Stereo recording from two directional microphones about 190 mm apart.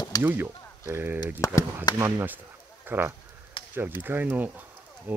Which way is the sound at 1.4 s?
15° left (ahead or behind).